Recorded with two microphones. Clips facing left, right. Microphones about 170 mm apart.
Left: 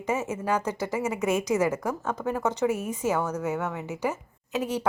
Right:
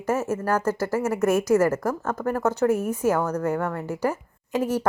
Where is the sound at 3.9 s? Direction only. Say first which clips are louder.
Right 4 dB; 10° right (ahead or behind).